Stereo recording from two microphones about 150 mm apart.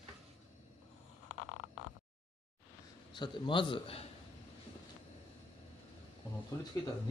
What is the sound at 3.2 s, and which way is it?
Speech, 35° left (ahead or behind).